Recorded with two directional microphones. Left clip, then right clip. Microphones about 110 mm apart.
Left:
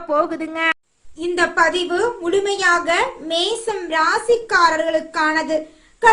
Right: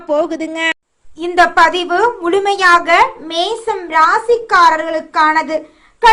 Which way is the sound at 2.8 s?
20° right (ahead or behind).